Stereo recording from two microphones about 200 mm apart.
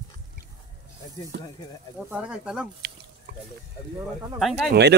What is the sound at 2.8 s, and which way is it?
Pig, 55° right (ahead or behind).